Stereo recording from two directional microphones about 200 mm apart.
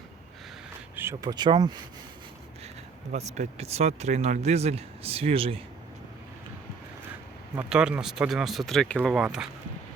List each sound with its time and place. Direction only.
0.9 s speech: 15° right (ahead or behind)
3.1 s speech: 35° right (ahead or behind)
7.5 s speech: 5° right (ahead or behind)